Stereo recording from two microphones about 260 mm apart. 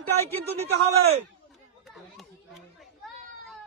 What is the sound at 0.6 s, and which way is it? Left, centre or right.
Speech, right.